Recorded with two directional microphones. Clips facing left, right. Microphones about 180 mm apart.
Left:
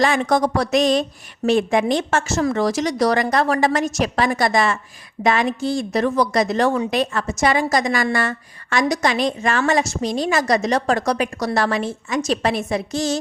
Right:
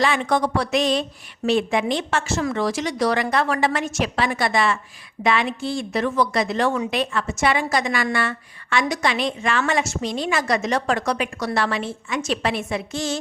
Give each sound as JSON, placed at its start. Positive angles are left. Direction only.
{"t": 0.0, "sound": "a woman's voice", "side_deg": 45}